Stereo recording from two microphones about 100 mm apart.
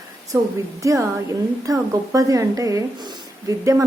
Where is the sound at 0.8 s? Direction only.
30° right (ahead or behind).